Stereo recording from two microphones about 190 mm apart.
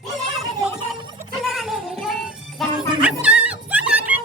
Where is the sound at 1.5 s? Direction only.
Centre (ahead or behind).